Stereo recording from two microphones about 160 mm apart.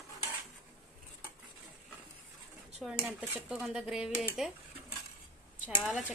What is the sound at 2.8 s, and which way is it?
Speech, 5° right (ahead or behind).